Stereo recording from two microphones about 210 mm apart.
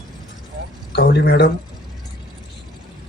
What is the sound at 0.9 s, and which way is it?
Speech, 50° left (ahead or behind).